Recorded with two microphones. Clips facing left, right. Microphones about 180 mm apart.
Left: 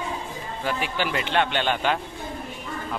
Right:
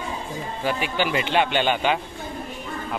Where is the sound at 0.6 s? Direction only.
5° right (ahead or behind).